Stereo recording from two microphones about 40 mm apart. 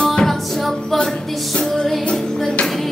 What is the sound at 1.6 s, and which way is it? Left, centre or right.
Music, centre.